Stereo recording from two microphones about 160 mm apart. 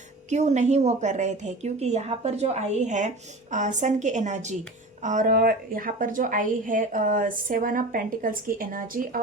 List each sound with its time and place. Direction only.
0.3 s a woman's voice: 45° right (ahead or behind)